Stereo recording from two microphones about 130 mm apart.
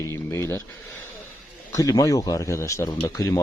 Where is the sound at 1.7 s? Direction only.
25° left (ahead or behind).